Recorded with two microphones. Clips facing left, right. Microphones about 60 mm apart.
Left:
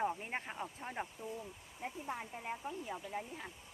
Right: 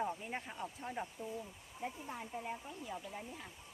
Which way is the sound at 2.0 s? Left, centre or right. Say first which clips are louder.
Left 1 dB; left.